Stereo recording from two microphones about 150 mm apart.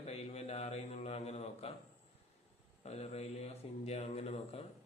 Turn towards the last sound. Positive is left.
turn(degrees=45)  # may be behind; listen again after turning